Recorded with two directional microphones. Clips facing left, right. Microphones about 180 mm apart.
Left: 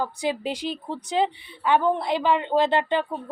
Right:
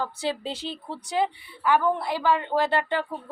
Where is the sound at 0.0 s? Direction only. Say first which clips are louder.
Left 3 dB; 15° left (ahead or behind).